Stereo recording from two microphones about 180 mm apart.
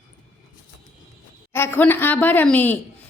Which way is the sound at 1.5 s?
10° left (ahead or behind).